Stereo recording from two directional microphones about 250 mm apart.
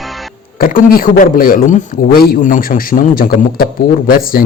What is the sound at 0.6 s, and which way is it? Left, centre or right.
A man's voice, left.